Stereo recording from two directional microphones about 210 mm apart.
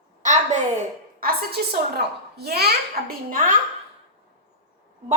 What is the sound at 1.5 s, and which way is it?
A woman's voice, 50° right (ahead or behind).